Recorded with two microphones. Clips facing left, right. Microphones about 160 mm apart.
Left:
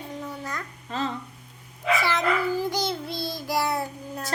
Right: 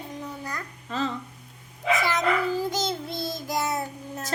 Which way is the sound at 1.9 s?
20° right (ahead or behind).